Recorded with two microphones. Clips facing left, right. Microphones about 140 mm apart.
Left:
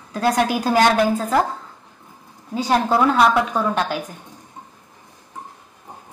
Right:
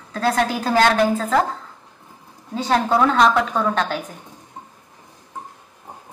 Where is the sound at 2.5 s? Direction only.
10° left (ahead or behind).